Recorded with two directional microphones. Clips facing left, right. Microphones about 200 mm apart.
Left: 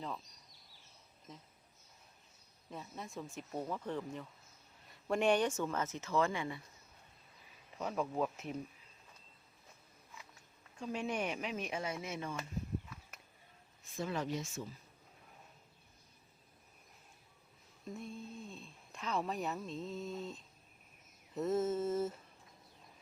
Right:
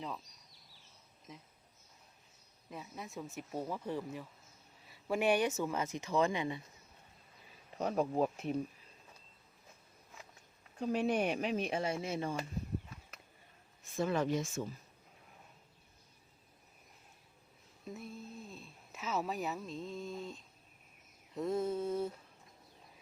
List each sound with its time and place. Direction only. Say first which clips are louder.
2.6 s speech: even; 5° right (ahead or behind)
7.8 s speech: right 4 dB; 35° right (ahead or behind)
11.0 s speech: right 5 dB; 35° right (ahead or behind)
13.9 s speech: right 5 dB; 55° right (ahead or behind)
17.8 s speech: left 1 dB; 5° right (ahead or behind)